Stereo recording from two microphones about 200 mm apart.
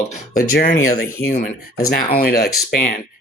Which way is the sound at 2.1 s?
50° left (ahead or behind).